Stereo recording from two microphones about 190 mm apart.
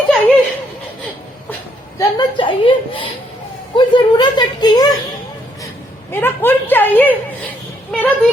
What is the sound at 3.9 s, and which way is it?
Speech, 25° left (ahead or behind).